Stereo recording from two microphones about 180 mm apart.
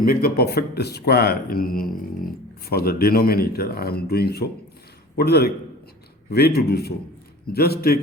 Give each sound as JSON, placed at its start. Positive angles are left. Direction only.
{"t": 0.0, "sound": "speech", "side_deg": 55}